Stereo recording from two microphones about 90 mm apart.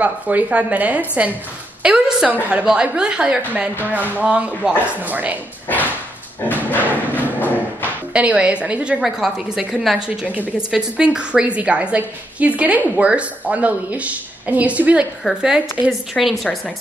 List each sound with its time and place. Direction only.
0.0 s a woman's voice: 15° right (ahead or behind)
1.8 s a sound: 10° right (ahead or behind)
2.5 s a woman's voice: 10° right (ahead or behind)
5.7 s a sound: 20° left (ahead or behind)
6.5 s dog: 20° left (ahead or behind)
7.3 s thump: 20° left (ahead or behind)
8.1 s a woman's voice: 15° right (ahead or behind)
16.1 s a woman's voice: 5° left (ahead or behind)